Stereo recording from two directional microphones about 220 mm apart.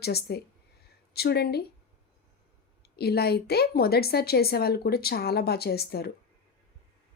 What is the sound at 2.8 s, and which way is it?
Speech, 45° left (ahead or behind).